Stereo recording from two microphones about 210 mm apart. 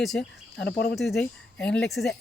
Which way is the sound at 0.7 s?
50° left (ahead or behind).